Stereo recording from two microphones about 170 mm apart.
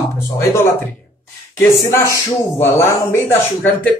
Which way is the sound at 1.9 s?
15° left (ahead or behind).